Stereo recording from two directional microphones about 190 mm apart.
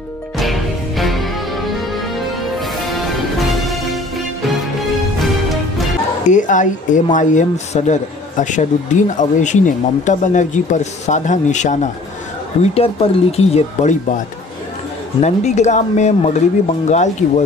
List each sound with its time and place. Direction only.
0.4 s music: centre (ahead or behind)
5.2 s music: centre (ahead or behind)
6.3 s speech: 40° left (ahead or behind)